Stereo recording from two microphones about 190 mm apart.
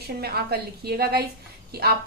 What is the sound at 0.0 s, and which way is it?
A woman's voice, 55° right (ahead or behind).